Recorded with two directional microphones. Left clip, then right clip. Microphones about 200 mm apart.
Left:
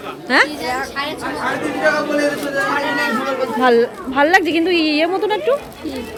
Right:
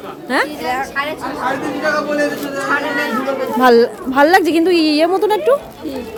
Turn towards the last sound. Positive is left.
turn(degrees=-30)  # may be behind; listen again after turning